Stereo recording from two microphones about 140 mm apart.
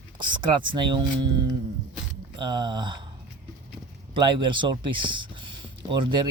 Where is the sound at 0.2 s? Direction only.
35° right (ahead or behind).